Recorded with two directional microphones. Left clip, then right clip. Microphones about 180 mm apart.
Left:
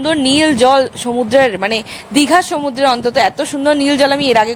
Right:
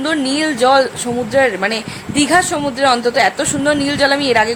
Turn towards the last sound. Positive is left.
turn(degrees=35)  # may be behind; listen again after turning